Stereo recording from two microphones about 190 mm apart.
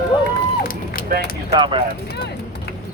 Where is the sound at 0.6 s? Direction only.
50° left (ahead or behind).